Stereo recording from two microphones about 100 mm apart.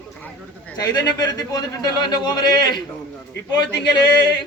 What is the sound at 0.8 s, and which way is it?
Speech, 40° left (ahead or behind).